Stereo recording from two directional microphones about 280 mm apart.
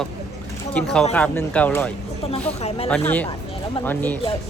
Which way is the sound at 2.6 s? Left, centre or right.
Left.